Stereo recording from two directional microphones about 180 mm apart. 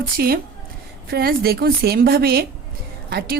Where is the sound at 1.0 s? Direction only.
55° right (ahead or behind).